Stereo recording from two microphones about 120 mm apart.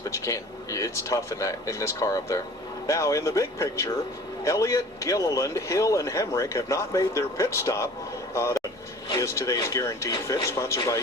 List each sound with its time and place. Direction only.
0.1 s speech: 25° left (ahead or behind)
8.3 s a sound: 25° left (ahead or behind)
9.1 s speech: 25° left (ahead or behind)